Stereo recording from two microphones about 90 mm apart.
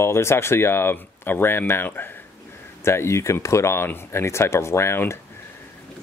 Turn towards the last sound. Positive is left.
turn(degrees=30)  # may be behind; listen again after turning